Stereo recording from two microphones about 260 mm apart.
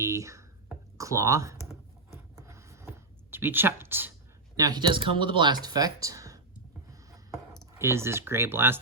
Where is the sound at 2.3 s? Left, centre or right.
Centre.